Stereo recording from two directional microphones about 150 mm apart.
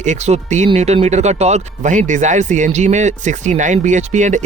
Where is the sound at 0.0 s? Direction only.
50° right (ahead or behind).